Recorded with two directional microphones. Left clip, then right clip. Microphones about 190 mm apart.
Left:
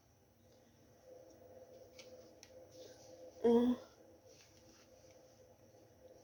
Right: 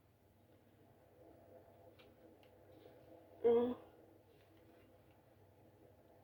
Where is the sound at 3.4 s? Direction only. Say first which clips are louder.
Left 1 dB; 55° left (ahead or behind).